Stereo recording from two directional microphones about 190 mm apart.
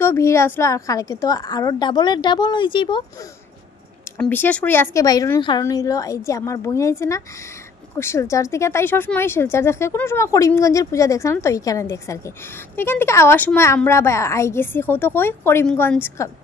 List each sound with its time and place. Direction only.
0.0 s a woman's voice: 15° left (ahead or behind)
4.2 s speech: 10° left (ahead or behind)